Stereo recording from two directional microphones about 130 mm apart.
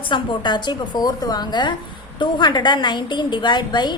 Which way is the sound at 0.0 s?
40° left (ahead or behind).